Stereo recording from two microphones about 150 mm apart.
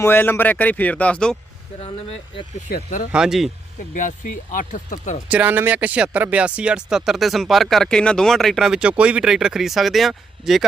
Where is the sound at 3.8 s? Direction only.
60° left (ahead or behind).